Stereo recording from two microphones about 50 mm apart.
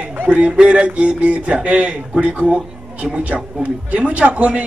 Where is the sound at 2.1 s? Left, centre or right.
Centre.